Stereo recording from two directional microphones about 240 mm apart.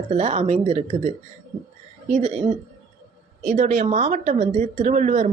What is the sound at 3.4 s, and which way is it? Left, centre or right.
A woman's voice, right.